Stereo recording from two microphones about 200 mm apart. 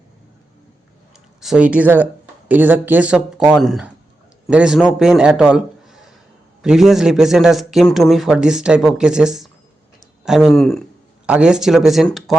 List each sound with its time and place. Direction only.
1.4 s a man's voice: 5° right (ahead or behind)